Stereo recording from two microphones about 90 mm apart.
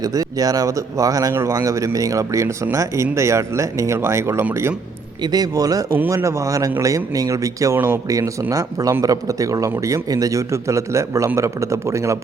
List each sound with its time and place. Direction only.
0.0 s speech: 40° right (ahead or behind)
5.2 s speech: 45° right (ahead or behind)